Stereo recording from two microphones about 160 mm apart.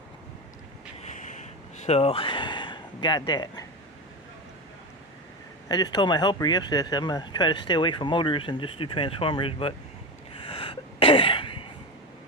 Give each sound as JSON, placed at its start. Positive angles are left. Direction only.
{"t": 1.1, "sound": "a sound", "side_deg": 50}
{"t": 1.9, "sound": "speech", "side_deg": 40}
{"t": 5.6, "sound": "speech", "side_deg": 25}
{"t": 10.5, "sound": "sneeze", "side_deg": 35}